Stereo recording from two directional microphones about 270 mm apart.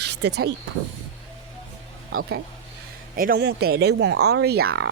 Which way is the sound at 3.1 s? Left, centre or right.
Right.